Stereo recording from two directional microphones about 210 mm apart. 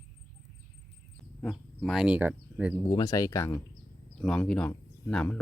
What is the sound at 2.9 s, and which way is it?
Speech, 15° left (ahead or behind).